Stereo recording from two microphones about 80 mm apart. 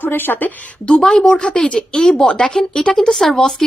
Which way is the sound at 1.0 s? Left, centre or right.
Centre.